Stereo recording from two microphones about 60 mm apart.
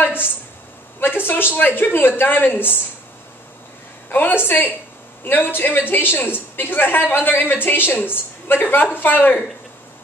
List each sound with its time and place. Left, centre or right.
0.0 s a sound: left
0.9 s a woman's voice: left
4.1 s a woman's voice: left